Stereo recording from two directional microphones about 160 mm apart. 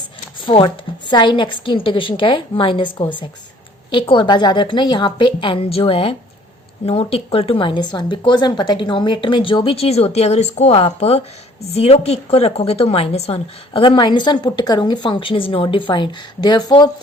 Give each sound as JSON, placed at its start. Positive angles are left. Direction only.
{"t": 0.4, "sound": "a woman's voice", "side_deg": 30}